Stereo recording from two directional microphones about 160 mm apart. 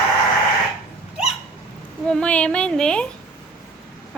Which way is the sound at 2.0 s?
5° left (ahead or behind).